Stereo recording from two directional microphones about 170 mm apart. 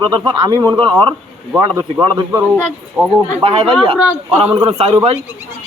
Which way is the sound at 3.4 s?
30° right (ahead or behind).